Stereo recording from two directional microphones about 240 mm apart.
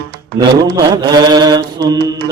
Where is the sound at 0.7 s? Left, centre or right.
Centre.